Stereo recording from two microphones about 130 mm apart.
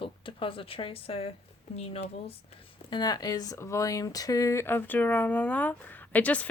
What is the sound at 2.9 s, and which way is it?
Speech, 30° left (ahead or behind).